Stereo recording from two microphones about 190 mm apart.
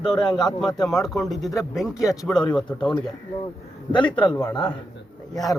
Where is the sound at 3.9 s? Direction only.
25° left (ahead or behind).